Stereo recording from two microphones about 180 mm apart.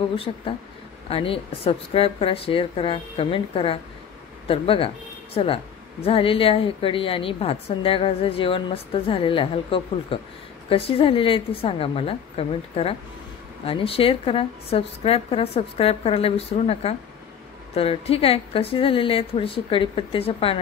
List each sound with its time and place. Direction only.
0.1 s speech: 30° left (ahead or behind)